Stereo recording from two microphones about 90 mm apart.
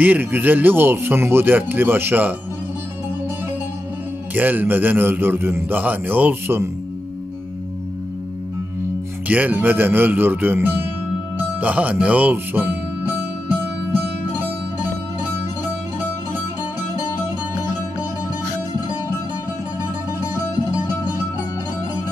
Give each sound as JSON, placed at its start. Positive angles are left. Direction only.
{"t": 0.0, "sound": "a man's voice", "side_deg": -20}
{"t": 4.3, "sound": "a man's voice", "side_deg": -20}
{"t": 9.3, "sound": "a man's voice", "side_deg": -15}